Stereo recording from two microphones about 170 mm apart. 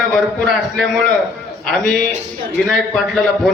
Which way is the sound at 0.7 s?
Centre (ahead or behind).